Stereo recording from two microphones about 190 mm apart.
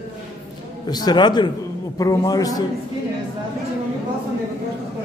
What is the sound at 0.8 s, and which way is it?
Speech, 20° left (ahead or behind).